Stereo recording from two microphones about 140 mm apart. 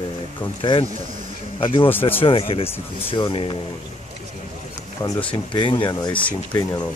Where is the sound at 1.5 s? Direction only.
35° left (ahead or behind).